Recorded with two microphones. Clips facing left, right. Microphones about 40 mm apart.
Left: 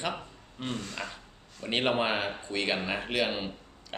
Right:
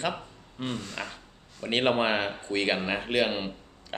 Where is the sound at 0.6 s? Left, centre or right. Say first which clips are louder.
Right 2 dB; centre.